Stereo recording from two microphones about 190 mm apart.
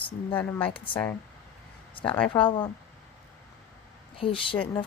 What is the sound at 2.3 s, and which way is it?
Speech, 25° left (ahead or behind).